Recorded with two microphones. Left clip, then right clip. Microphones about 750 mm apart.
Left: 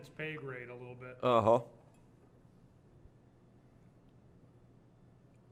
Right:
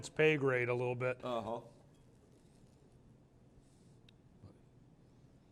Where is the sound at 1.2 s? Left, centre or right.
Left.